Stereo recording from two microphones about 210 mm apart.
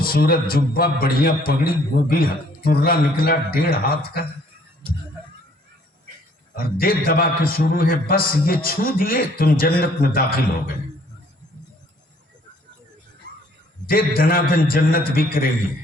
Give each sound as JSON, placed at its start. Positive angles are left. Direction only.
{"t": 0.0, "sound": "a man's voice", "side_deg": 45}
{"t": 6.6, "sound": "a man's voice", "side_deg": 45}
{"t": 14.2, "sound": "a man's voice", "side_deg": 45}